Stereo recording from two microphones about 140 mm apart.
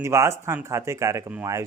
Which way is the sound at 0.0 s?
20° right (ahead or behind).